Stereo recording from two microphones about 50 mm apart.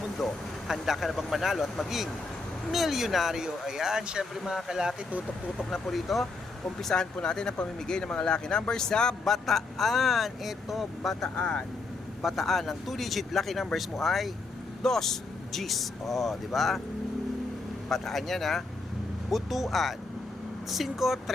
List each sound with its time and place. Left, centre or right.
0.2 s vehicle: centre
0.7 s speech: centre
2.7 s speech: centre
5.5 s speech: centre
6.8 s speech: centre
11.3 s speech: centre
12.2 s speech: centre
17.8 s speech: centre